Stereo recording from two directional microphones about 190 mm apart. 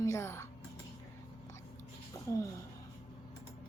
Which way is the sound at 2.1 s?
15° left (ahead or behind).